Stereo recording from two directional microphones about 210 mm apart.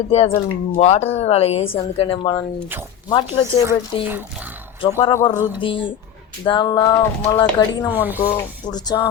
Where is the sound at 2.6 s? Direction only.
10° right (ahead or behind).